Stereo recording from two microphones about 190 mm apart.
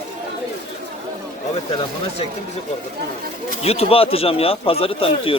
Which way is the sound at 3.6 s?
30° left (ahead or behind).